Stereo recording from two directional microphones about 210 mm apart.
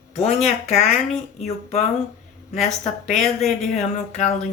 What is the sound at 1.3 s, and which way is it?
Speech, 30° left (ahead or behind).